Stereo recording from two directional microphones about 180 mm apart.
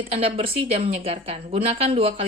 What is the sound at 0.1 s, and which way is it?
Speech, 35° right (ahead or behind).